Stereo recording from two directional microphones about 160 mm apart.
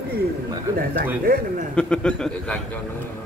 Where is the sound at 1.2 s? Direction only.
65° right (ahead or behind).